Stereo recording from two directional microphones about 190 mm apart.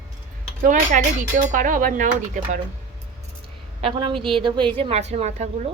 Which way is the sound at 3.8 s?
25° right (ahead or behind).